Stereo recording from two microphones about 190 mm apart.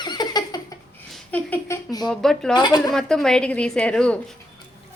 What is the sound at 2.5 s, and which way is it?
Speech, 20° left (ahead or behind).